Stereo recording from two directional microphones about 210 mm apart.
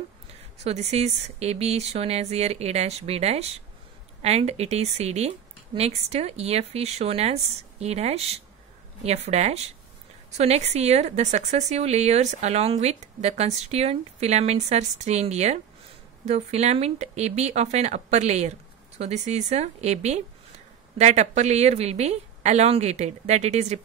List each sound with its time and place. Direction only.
0.7 s a woman's voice: 30° right (ahead or behind)